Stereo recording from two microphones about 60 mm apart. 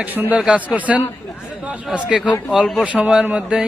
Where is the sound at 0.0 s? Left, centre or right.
Right.